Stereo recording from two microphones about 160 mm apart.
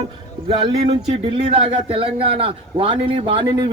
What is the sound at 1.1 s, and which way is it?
A man's voice, 35° right (ahead or behind).